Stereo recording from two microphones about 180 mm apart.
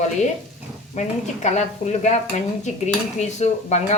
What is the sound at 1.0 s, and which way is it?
A woman's voice, 40° left (ahead or behind).